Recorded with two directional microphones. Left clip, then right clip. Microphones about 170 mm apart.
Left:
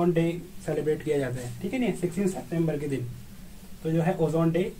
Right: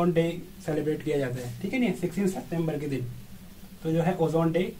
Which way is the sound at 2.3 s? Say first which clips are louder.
Left 2 dB; 20° left (ahead or behind).